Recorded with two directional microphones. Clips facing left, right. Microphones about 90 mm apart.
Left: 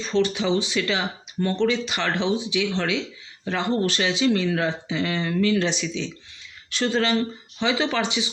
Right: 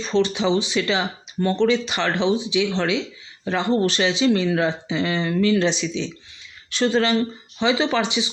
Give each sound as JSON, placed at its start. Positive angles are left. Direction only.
{"t": 0.0, "sound": "speech", "side_deg": -25}